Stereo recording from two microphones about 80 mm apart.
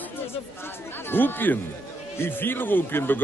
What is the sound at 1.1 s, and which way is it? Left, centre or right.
Speech, left.